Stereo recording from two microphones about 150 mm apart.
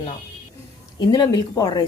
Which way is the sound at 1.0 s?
25° left (ahead or behind).